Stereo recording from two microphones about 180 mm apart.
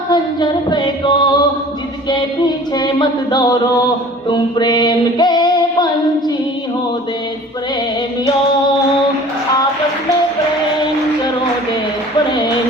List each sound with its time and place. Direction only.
0.1 s music: 25° left (ahead or behind)